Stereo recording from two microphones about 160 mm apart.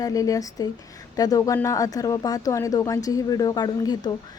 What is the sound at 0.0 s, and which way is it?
A woman's voice, 20° left (ahead or behind).